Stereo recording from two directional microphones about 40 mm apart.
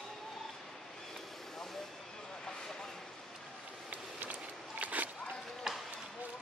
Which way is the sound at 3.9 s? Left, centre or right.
Right.